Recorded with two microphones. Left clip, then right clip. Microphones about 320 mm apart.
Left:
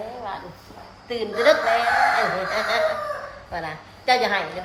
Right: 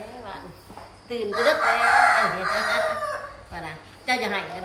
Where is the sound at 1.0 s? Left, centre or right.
Left.